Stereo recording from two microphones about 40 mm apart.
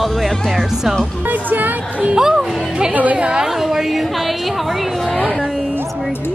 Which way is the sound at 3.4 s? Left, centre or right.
Centre.